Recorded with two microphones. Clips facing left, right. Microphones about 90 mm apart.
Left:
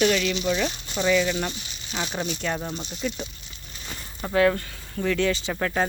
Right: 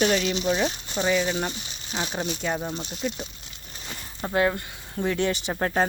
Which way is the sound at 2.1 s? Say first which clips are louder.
Even; 10° right (ahead or behind).